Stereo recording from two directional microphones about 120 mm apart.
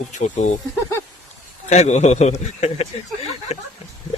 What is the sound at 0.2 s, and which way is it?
Speech, 90° left.